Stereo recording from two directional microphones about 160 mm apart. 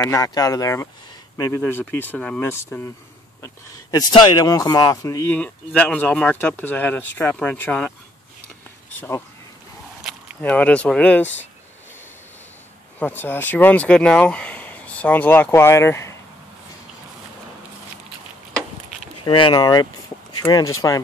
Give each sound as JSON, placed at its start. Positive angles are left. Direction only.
{"t": 0.1, "sound": "speech", "side_deg": 25}
{"t": 4.1, "sound": "speech", "side_deg": 25}
{"t": 10.4, "sound": "speech", "side_deg": 10}
{"t": 13.0, "sound": "speech", "side_deg": 15}
{"t": 19.2, "sound": "speech", "side_deg": 30}